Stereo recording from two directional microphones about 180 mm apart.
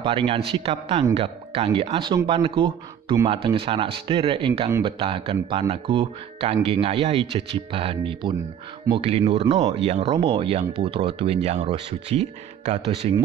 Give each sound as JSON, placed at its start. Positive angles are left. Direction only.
{"t": 0.0, "sound": "speech", "side_deg": -30}